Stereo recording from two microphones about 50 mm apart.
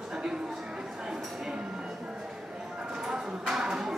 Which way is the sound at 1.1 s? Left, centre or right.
Centre.